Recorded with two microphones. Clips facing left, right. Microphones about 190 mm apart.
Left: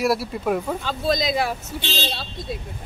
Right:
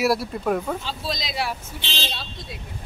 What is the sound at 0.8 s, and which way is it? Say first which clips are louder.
Speech: left 8 dB; 50° left (ahead or behind).